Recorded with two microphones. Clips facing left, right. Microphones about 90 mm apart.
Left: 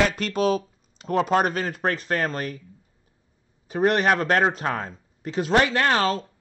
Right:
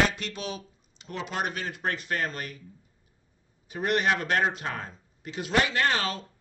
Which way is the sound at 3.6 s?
35° left (ahead or behind).